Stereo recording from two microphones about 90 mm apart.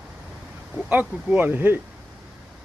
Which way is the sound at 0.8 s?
20° right (ahead or behind).